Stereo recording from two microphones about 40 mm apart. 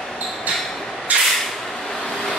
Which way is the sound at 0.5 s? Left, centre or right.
Right.